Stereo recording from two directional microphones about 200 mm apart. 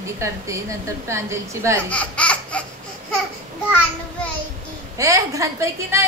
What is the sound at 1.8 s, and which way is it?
Baby laughter, 5° left (ahead or behind).